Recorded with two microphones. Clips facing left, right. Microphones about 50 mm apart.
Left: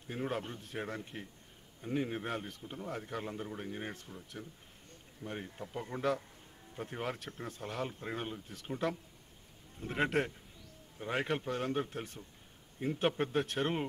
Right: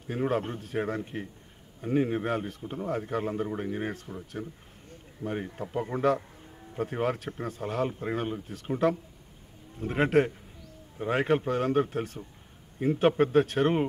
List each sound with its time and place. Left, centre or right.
0.1 s a man's voice: right